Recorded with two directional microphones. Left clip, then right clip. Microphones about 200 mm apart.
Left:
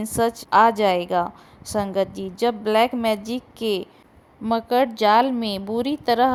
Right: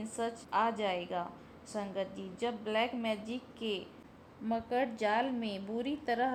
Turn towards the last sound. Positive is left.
turn(degrees=35)  # may be behind; listen again after turning